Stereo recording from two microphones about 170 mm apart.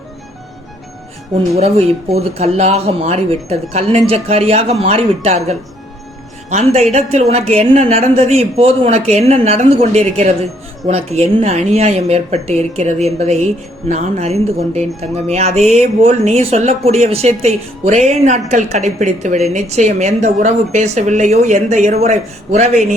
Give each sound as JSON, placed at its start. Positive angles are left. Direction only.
{"t": 1.5, "sound": "speech", "side_deg": -40}